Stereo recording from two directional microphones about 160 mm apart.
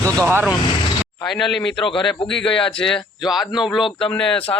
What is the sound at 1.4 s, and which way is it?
A man's voice, 5° left (ahead or behind).